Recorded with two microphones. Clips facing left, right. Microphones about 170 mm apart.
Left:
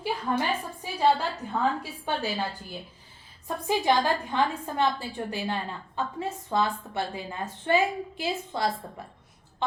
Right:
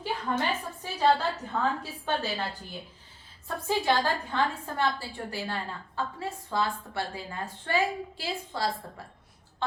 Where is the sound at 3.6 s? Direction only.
15° left (ahead or behind).